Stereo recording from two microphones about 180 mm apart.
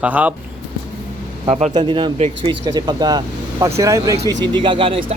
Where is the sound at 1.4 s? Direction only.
35° right (ahead or behind).